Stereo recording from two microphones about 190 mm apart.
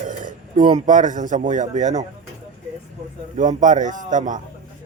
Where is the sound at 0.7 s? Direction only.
40° right (ahead or behind).